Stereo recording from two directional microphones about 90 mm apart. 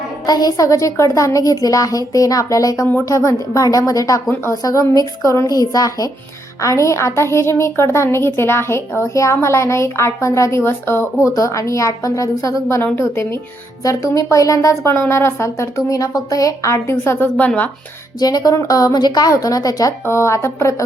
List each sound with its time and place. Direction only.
0.3 s a woman's voice: 45° left (ahead or behind); by 11.1 s 25° left (ahead or behind)
11.3 s a woman's voice: 35° left (ahead or behind)
17.3 s speech: 15° left (ahead or behind)
18.2 s a woman's voice: 45° left (ahead or behind)
20.1 s a woman's voice: 30° left (ahead or behind)